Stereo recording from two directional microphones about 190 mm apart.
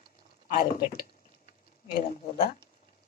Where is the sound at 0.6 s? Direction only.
50° left (ahead or behind).